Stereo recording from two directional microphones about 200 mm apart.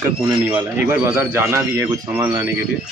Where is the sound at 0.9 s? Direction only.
15° right (ahead or behind).